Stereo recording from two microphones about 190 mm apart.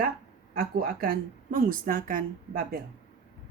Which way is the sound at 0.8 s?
50° right (ahead or behind).